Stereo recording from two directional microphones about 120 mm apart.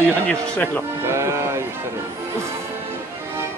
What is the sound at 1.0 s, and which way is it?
Music, 25° right (ahead or behind).